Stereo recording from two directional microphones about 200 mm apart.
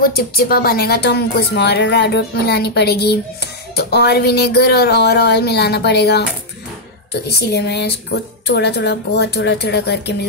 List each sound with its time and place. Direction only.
0.0 s a woman's voice: 50° left (ahead or behind)